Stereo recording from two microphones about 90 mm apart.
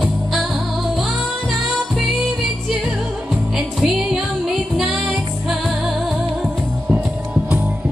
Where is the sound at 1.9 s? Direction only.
Centre (ahead or behind).